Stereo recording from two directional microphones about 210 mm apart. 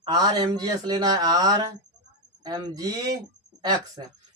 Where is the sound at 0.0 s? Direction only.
20° right (ahead or behind).